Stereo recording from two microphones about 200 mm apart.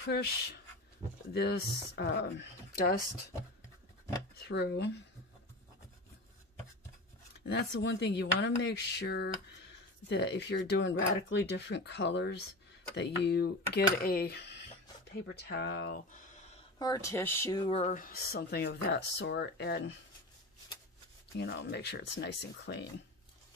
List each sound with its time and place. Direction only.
1.3 s speech: 55° left (ahead or behind)
4.4 s speech: 55° left (ahead or behind)
7.4 s speech: 60° left (ahead or behind)
16.1 s a sound: 35° left (ahead or behind)
16.7 s speech: 20° left (ahead or behind); by 20.0 s 60° left (ahead or behind)
21.4 s speech: 60° left (ahead or behind)